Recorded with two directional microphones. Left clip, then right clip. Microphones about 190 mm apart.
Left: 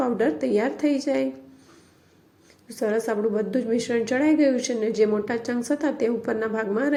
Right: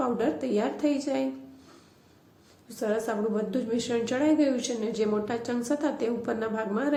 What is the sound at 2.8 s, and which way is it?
A woman's voice, 25° left (ahead or behind).